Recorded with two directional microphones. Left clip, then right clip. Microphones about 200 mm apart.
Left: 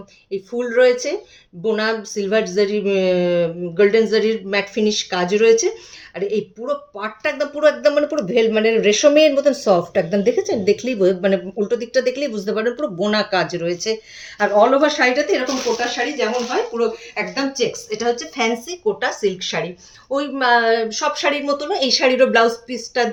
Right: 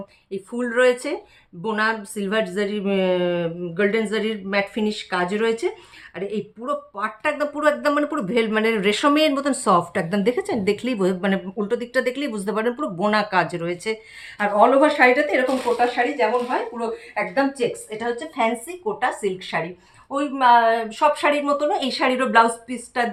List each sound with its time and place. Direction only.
0.3 s speech: 45° right (ahead or behind)
16.7 s speech: 20° right (ahead or behind)
18.9 s speech: 25° right (ahead or behind); by 23.0 s 45° right (ahead or behind)